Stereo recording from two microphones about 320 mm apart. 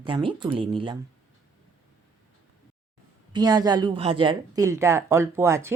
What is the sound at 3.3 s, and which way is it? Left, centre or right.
A woman's voice, centre.